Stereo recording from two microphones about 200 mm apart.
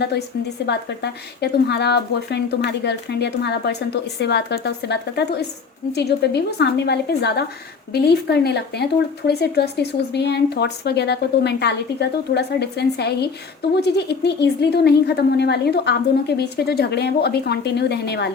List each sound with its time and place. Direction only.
0.6 s speech: 55° left (ahead or behind)